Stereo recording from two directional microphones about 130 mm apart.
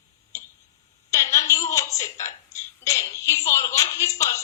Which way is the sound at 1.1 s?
25° left (ahead or behind).